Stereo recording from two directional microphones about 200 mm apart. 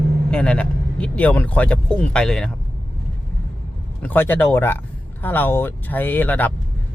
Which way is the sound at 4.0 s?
10° left (ahead or behind).